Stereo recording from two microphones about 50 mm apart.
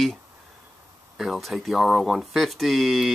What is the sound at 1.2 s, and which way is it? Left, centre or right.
Speech, centre.